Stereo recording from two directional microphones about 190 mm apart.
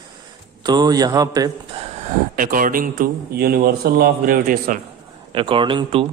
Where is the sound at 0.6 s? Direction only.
20° right (ahead or behind).